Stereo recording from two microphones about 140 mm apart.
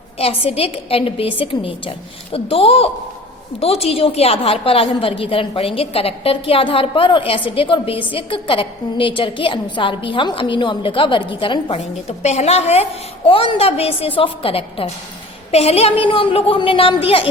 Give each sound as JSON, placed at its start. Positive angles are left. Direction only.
{"t": 0.2, "sound": "a woman's voice", "side_deg": 45}